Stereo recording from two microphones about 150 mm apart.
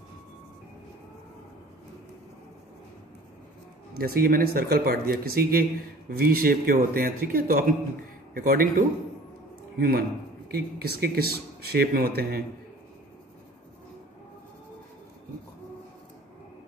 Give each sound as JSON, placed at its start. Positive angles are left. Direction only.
{"t": 4.0, "sound": "speech", "side_deg": -90}
{"t": 9.8, "sound": "speech", "side_deg": -90}